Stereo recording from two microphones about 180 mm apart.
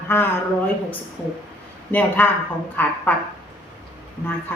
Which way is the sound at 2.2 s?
10° left (ahead or behind).